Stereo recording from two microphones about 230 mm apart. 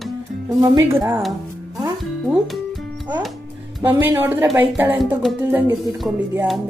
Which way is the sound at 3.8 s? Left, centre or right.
Centre.